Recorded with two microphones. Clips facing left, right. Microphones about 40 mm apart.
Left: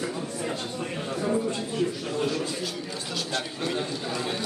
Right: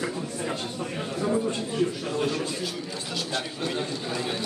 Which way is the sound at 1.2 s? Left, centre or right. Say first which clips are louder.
Right 1 dB; centre.